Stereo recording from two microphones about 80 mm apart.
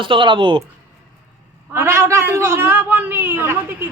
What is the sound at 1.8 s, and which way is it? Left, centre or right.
A man's voice, right.